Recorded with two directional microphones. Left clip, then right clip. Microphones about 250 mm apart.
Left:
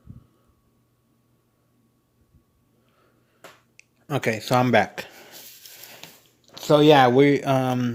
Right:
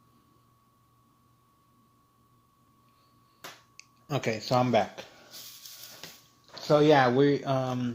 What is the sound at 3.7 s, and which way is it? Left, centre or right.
Speech, left.